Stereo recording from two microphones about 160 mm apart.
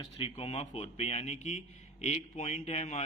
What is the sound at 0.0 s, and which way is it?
A man's voice, 35° left (ahead or behind).